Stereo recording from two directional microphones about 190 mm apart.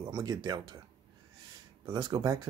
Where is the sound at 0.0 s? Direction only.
20° right (ahead or behind).